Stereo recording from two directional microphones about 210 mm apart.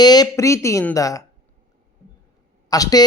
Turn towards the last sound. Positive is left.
turn(degrees=20)  # may be behind; listen again after turning